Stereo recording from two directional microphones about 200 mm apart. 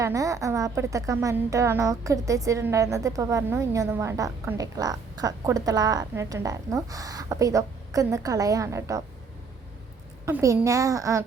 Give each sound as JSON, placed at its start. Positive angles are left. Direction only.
{"t": 0.0, "sound": "a woman's voice", "side_deg": -15}
{"t": 10.2, "sound": "a woman's voice", "side_deg": -15}